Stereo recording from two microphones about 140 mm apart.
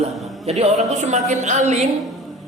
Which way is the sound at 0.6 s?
50° right (ahead or behind).